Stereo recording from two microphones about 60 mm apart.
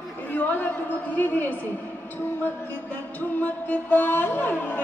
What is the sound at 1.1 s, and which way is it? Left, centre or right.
Music, left.